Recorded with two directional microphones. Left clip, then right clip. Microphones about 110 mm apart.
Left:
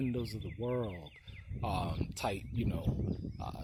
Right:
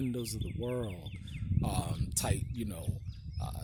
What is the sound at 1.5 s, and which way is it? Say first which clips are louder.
Speech: left 2 dB; 45° right (ahead or behind).